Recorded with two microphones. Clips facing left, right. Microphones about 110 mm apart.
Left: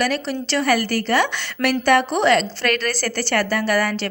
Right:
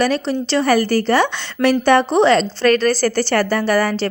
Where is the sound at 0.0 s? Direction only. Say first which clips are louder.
Right 4 dB; 25° right (ahead or behind).